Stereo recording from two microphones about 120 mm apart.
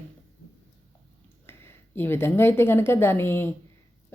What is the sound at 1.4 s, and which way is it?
Speech, 20° left (ahead or behind).